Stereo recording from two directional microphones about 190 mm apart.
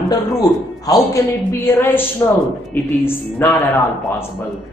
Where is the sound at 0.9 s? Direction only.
15° left (ahead or behind).